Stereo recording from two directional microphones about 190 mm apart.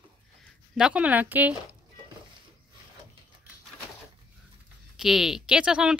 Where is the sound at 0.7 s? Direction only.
5° right (ahead or behind).